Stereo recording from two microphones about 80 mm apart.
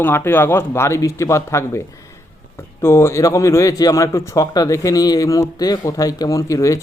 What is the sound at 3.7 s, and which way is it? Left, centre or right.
A man's voice, left.